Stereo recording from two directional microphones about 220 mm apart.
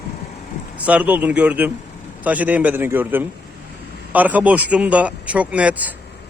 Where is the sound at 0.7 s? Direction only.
5° right (ahead or behind).